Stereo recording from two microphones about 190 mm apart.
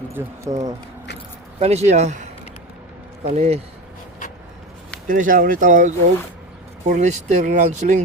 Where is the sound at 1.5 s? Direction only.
35° right (ahead or behind).